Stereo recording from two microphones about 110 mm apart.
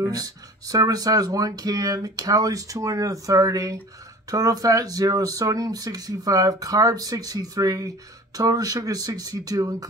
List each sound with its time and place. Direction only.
0.1 s speech: 35° right (ahead or behind)